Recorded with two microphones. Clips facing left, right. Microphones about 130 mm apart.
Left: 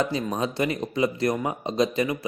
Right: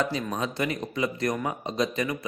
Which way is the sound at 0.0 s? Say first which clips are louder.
Left 3 dB; 35° left (ahead or behind).